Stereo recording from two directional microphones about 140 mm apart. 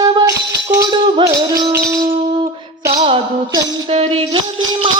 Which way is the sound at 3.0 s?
35° right (ahead or behind).